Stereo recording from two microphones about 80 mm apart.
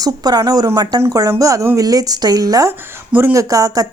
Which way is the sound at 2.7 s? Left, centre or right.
Right.